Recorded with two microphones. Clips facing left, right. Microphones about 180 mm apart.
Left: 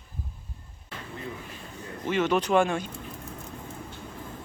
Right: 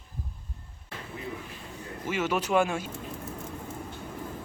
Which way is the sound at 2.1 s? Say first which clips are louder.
Left 4 dB; 5° right (ahead or behind).